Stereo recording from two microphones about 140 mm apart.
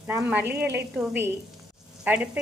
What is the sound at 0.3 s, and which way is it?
A woman's voice, 15° right (ahead or behind).